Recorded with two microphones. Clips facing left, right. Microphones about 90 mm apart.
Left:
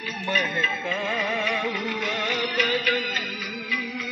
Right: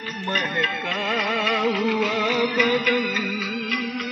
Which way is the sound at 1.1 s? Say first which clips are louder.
Right 5 dB; 90° right.